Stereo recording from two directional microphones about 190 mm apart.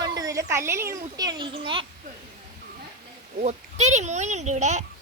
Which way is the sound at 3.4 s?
35° right (ahead or behind).